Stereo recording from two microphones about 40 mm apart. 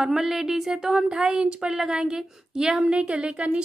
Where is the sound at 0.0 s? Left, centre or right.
Centre.